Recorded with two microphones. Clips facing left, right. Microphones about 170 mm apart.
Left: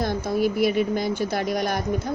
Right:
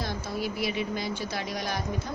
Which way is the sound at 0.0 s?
50° left (ahead or behind).